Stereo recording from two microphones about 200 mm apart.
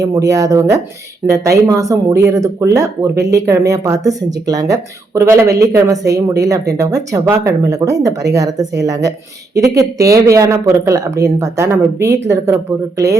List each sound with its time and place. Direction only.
0.0 s speech: 15° right (ahead or behind)